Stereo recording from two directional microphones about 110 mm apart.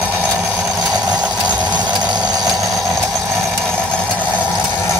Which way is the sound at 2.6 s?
Centre (ahead or behind).